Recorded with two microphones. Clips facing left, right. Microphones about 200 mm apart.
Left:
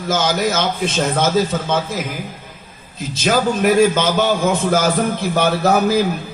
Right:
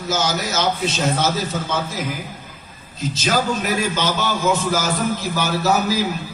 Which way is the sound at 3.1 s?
50° left (ahead or behind).